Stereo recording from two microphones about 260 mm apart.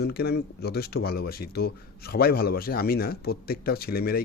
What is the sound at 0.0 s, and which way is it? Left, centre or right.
Speech, left.